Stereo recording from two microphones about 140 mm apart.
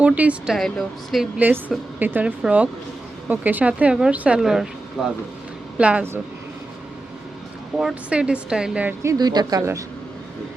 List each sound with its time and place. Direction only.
0.0 s speech: 10° right (ahead or behind)
2.0 s speech: 15° right (ahead or behind)
7.8 s speech: 5° right (ahead or behind)
9.1 s speech: 30° right (ahead or behind)